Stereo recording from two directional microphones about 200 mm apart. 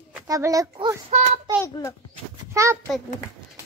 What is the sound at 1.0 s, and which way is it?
Speech, 35° right (ahead or behind).